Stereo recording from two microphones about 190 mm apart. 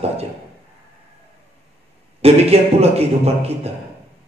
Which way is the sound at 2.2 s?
30° right (ahead or behind).